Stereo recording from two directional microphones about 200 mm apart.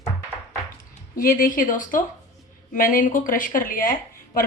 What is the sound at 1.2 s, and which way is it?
A woman's voice, 45° left (ahead or behind).